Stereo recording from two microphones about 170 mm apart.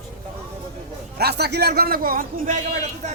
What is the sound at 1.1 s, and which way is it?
A man's voice, 70° right (ahead or behind).